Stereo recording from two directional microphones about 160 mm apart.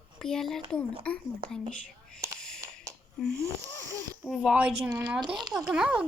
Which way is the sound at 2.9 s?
20° right (ahead or behind).